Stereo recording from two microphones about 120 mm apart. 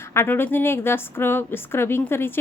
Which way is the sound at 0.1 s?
20° left (ahead or behind).